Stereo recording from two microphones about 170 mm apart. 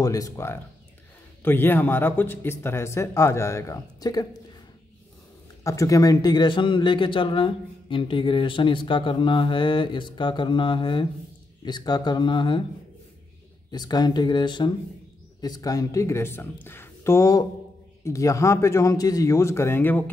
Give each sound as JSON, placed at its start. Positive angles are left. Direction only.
{"t": 0.0, "sound": "a man's voice", "side_deg": 20}
{"t": 5.6, "sound": "a man's voice", "side_deg": 20}
{"t": 13.7, "sound": "a man's voice", "side_deg": 25}